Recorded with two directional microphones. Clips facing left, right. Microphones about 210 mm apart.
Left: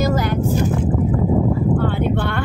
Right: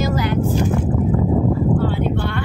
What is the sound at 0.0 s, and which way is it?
Vehicle, 45° left (ahead or behind).